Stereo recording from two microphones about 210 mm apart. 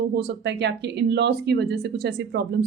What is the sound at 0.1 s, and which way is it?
A woman's voice, 55° right (ahead or behind).